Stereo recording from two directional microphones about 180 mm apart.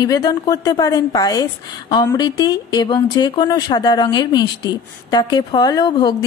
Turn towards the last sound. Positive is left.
turn(degrees=25)  # may be behind; listen again after turning